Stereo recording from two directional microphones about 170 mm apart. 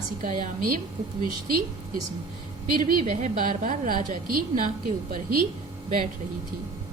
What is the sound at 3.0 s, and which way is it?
A woman's voice, 45° right (ahead or behind).